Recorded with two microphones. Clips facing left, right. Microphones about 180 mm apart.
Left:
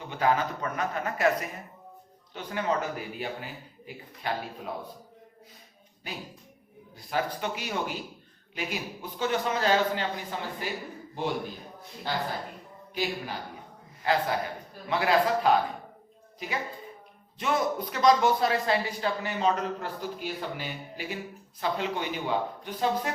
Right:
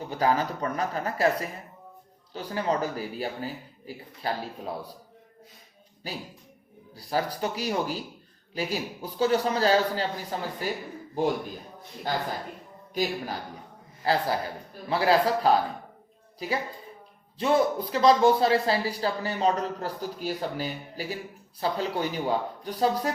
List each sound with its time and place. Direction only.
0.1 s speech: 35° right (ahead or behind)
6.9 s a man's voice: 35° right (ahead or behind)
17.3 s speech: 30° right (ahead or behind)